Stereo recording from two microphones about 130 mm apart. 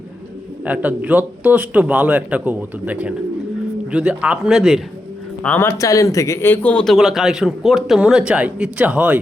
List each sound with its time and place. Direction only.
0.6 s speech: 10° right (ahead or behind)
5.4 s speech: 15° left (ahead or behind)
6.8 s speech: 5° right (ahead or behind)